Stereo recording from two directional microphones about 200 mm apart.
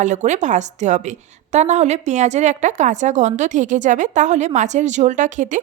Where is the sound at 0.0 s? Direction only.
35° right (ahead or behind).